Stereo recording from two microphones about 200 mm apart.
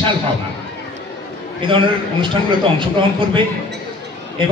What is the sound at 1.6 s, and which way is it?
Speech, 25° right (ahead or behind).